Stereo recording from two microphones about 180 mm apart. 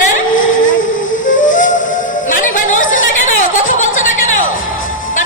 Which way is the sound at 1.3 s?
45° left (ahead or behind).